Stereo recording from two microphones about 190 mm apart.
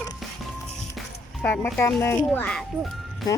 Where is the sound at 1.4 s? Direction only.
10° left (ahead or behind).